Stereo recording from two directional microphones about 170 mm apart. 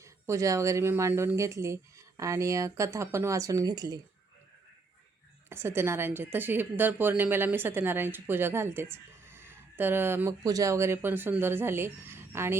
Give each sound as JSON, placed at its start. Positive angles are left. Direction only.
{"t": 0.0, "sound": "a woman's voice", "side_deg": -20}
{"t": 5.5, "sound": "a woman's voice", "side_deg": -15}